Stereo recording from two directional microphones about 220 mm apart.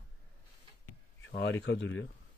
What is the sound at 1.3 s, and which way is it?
Speech, 50° left (ahead or behind).